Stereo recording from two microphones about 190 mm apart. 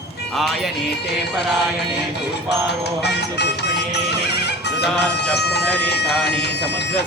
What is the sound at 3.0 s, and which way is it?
Music, 60° left (ahead or behind).